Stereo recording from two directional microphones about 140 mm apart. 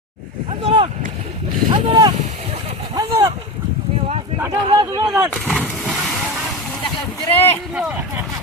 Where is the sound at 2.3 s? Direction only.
55° right (ahead or behind).